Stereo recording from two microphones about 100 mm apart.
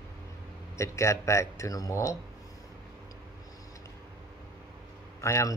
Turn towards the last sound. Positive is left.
turn(degrees=30)  # may be behind; listen again after turning